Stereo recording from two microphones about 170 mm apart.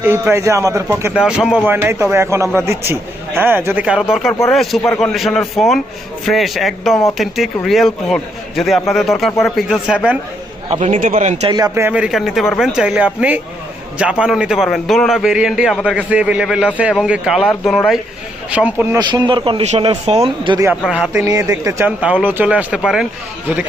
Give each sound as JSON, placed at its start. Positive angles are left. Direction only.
{"t": 0.0, "sound": "speech", "side_deg": -15}
{"t": 1.2, "sound": "a man's voice", "side_deg": -5}
{"t": 10.7, "sound": "speech", "side_deg": -45}
{"t": 11.4, "sound": "a man's voice", "side_deg": -20}
{"t": 18.9, "sound": "speech", "side_deg": -25}
{"t": 20.8, "sound": "a man's voice", "side_deg": 0}
{"t": 21.1, "sound": "speech", "side_deg": -20}